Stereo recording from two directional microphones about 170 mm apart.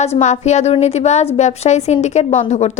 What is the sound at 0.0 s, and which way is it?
A woman's voice, 40° left (ahead or behind).